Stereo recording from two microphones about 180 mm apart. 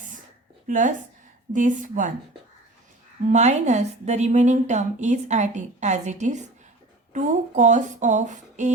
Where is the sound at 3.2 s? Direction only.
40° right (ahead or behind).